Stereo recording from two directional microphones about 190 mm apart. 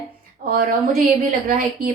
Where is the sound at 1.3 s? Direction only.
50° right (ahead or behind).